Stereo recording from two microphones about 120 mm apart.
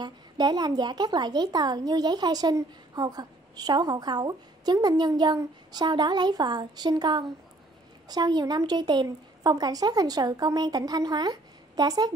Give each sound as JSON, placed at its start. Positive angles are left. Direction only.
{"t": 0.0, "sound": "a woman's voice", "side_deg": -35}